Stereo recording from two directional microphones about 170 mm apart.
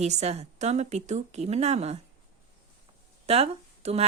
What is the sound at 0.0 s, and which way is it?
A woman's voice, 40° right (ahead or behind).